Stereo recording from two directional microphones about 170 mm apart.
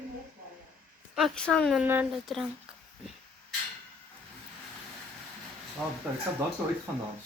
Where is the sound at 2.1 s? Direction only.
Centre (ahead or behind).